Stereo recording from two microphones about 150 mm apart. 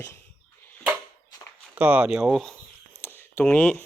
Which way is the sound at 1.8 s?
10° right (ahead or behind).